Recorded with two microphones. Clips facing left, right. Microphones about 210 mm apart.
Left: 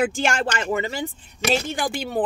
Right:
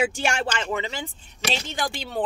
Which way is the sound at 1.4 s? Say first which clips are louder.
Left 5 dB; 50° left (ahead or behind).